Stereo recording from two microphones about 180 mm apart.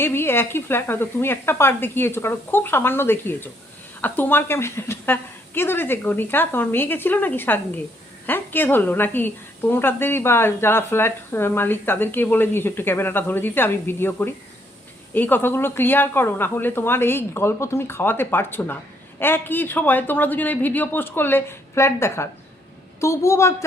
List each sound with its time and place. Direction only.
0.0 s a woman's voice: 10° left (ahead or behind)